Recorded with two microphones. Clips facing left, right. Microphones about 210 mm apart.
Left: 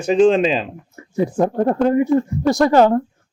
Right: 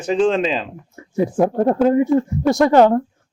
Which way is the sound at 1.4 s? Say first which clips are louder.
Right 1 dB; 5° right (ahead or behind).